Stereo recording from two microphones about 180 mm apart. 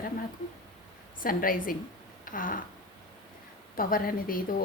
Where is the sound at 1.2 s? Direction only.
50° left (ahead or behind).